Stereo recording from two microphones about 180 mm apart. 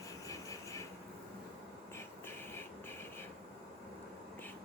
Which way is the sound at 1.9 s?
15° left (ahead or behind).